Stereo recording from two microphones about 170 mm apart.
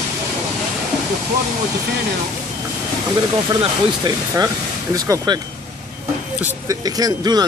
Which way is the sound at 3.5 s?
25° right (ahead or behind).